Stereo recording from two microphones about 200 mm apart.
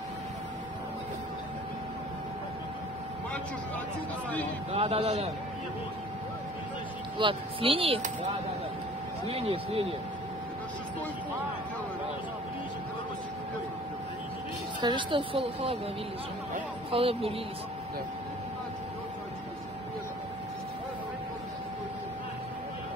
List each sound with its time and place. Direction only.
4.7 s a man's voice: 30° right (ahead or behind)
7.2 s a woman's voice: 25° right (ahead or behind)
9.3 s a woman's voice: 30° right (ahead or behind)
14.8 s a woman's voice: 25° right (ahead or behind)
16.9 s a woman's voice: 30° right (ahead or behind)